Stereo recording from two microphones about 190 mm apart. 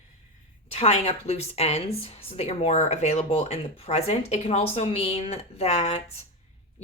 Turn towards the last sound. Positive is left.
turn(degrees=35)  # may be behind; listen again after turning